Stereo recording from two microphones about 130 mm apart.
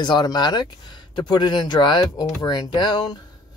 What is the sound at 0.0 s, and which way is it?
Speech, 35° left (ahead or behind).